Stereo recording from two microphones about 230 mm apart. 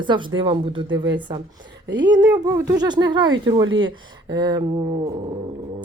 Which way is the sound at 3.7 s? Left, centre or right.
Right.